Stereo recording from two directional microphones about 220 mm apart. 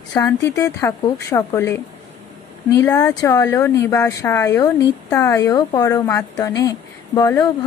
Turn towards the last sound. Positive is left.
turn(degrees=15)  # may be behind; listen again after turning